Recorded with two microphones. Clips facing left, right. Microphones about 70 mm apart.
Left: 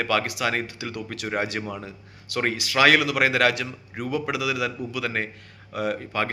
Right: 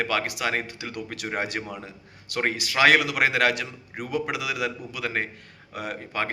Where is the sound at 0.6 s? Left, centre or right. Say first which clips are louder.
Left 2 dB; centre.